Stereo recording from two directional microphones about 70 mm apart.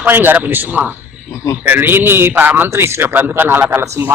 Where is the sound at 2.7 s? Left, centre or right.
Right.